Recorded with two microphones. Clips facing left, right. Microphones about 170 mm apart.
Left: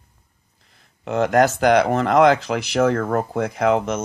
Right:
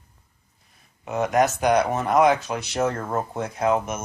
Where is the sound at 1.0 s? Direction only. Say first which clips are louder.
Left 4 dB; 85° left.